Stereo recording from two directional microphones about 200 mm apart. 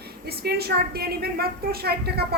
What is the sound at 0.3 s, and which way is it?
A woman's voice, 50° right (ahead or behind).